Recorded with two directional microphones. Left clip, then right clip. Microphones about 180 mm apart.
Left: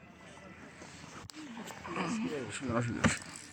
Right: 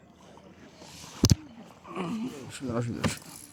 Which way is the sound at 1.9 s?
75° right (ahead or behind).